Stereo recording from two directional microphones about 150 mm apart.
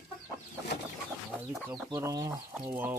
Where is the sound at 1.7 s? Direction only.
20° right (ahead or behind).